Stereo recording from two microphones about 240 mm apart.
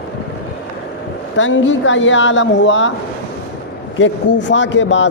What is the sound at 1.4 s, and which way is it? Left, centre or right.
Speech, left.